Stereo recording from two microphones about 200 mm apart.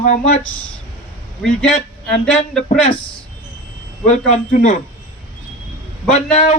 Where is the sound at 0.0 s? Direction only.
40° left (ahead or behind).